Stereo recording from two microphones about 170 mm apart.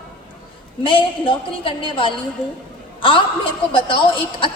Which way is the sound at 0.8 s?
30° left (ahead or behind).